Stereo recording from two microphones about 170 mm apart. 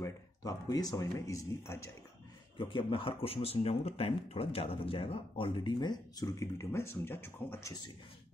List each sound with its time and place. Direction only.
0.0 s speech: 20° left (ahead or behind)
2.5 s speech: 30° left (ahead or behind); by 7.7 s 15° left (ahead or behind)